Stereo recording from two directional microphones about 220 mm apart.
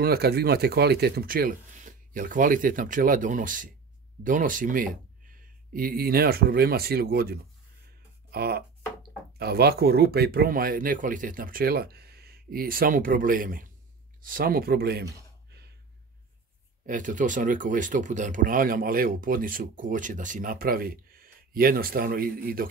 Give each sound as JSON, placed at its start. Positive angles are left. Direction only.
{"t": 0.0, "sound": "speech", "side_deg": -45}
{"t": 8.3, "sound": "music", "side_deg": -45}
{"t": 9.4, "sound": "speech", "side_deg": -45}
{"t": 16.8, "sound": "speech", "side_deg": -35}